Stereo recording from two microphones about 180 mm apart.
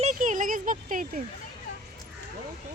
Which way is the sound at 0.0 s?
45° right (ahead or behind).